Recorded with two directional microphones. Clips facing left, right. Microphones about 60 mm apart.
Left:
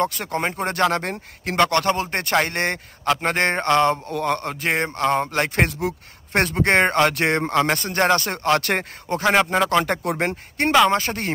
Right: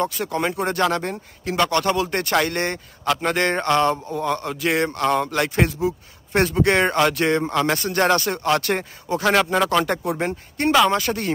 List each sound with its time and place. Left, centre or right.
0.0 s speech: left
1.4 s speech: left
1.9 s speech: left
4.1 s speech: left
5.7 s speech: left
9.2 s speech: centre
10.0 s speech: left
10.9 s speech: left